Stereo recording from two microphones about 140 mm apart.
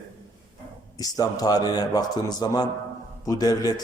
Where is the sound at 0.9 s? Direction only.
25° left (ahead or behind).